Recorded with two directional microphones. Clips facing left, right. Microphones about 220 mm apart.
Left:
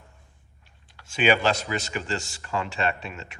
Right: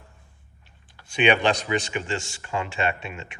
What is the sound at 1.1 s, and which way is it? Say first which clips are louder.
Speech: right 1 dB; centre (ahead or behind).